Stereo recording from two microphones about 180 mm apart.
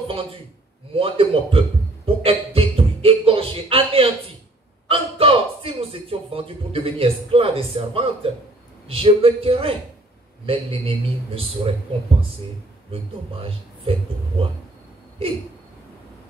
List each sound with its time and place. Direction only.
0.1 s a man's voice: 30° right (ahead or behind)
2.0 s beatboxing: 30° right (ahead or behind)
4.8 s a man's voice: 30° right (ahead or behind)
12.9 s a man's voice: 30° right (ahead or behind)